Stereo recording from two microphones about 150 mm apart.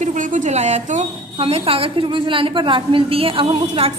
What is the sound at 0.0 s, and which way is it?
A woman's voice, 55° right (ahead or behind).